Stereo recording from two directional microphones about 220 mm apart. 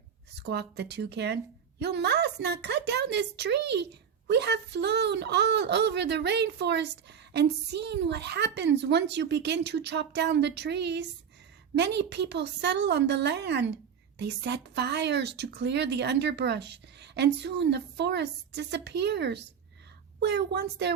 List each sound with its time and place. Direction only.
0.3 s speech: 50° right (ahead or behind)